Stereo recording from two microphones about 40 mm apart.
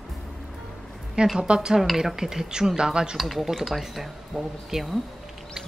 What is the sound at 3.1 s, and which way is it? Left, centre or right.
Speech, centre.